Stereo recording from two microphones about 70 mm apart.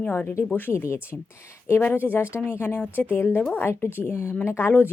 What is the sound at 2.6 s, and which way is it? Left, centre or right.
Speech, left.